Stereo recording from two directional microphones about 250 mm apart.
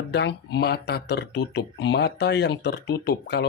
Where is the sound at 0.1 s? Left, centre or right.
Left.